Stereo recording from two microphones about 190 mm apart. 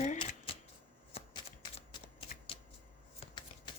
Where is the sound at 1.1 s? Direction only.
25° left (ahead or behind).